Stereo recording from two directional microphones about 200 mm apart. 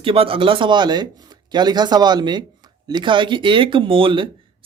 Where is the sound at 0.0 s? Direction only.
25° right (ahead or behind).